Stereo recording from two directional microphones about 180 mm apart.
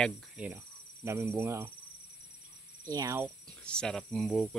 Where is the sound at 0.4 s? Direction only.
5° right (ahead or behind).